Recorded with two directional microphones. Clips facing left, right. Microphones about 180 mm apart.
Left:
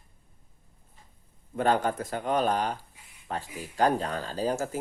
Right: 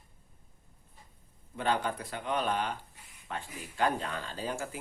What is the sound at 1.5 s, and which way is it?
Speech, 45° left (ahead or behind).